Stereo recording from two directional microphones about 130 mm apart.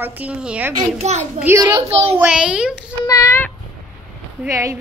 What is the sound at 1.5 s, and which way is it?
Speech, 15° right (ahead or behind).